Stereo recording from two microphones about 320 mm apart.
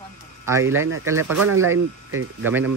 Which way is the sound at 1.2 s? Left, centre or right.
Right.